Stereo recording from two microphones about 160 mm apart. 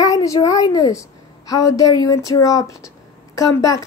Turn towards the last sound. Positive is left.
turn(degrees=20)  # may be behind; listen again after turning